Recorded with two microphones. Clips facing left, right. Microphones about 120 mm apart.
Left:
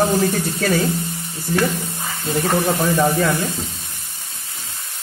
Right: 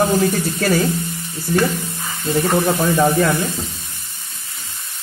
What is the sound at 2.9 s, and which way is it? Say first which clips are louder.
Speech: right 3 dB; 20° right (ahead or behind).